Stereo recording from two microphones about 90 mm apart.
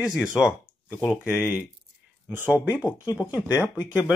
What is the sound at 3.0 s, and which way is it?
Speech, 50° left (ahead or behind).